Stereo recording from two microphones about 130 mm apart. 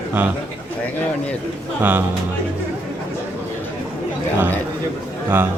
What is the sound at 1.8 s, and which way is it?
Speech, 15° right (ahead or behind).